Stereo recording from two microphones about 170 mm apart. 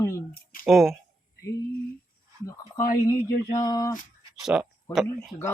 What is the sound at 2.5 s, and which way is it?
Speech, 20° left (ahead or behind).